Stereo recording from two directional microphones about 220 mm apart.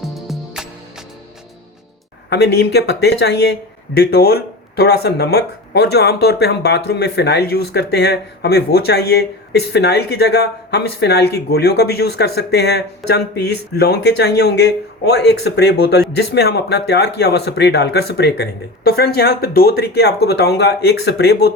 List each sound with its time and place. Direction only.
0.1 s music: centre (ahead or behind)
2.3 s speech: 50° left (ahead or behind)